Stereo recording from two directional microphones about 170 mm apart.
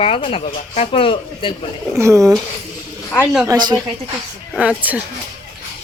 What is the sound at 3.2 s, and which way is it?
Speech, centre (ahead or behind).